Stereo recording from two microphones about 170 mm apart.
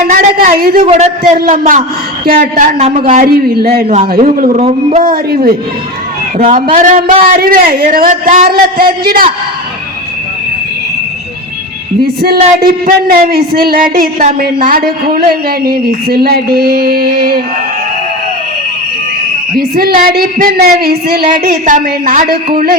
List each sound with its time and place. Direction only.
0.1 s speech: 55° right (ahead or behind)
0.8 s a man's voice: 40° right (ahead or behind)
1.4 s a man's voice: 55° right (ahead or behind)
4.4 s a man's voice: 50° right (ahead or behind)
4.6 s speech: 40° right (ahead or behind)
5.0 s speech: 60° right (ahead or behind)
12.0 s speech: 65° right (ahead or behind)
19.5 s speech: 65° right (ahead or behind)